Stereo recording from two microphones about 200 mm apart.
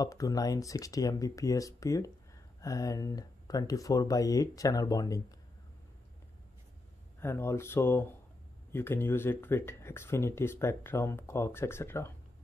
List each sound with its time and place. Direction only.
0.0 s speech: 15° left (ahead or behind)
7.2 s speech: 10° left (ahead or behind)